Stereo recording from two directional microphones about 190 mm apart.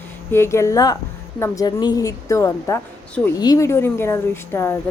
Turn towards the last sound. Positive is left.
turn(degrees=10)  # may be behind; listen again after turning